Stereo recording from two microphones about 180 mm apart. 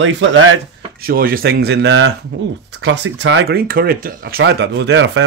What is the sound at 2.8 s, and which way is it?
Speech, 75° right (ahead or behind).